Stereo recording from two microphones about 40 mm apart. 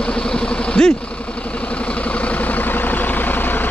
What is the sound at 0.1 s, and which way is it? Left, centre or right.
Vehicle, left.